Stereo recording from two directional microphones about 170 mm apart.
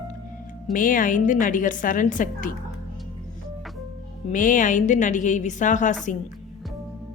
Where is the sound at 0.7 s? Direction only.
50° left (ahead or behind).